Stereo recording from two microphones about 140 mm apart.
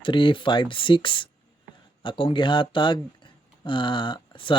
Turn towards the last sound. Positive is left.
turn(degrees=35)  # may be behind; listen again after turning